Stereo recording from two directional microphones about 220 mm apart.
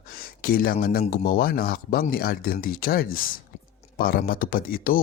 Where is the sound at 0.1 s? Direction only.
40° left (ahead or behind).